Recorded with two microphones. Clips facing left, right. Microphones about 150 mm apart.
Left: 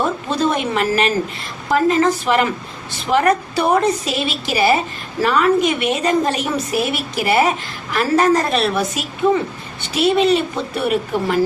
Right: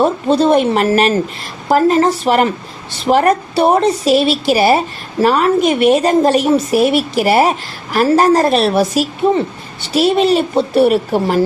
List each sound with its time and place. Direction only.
0.0 s a woman's voice: 30° right (ahead or behind)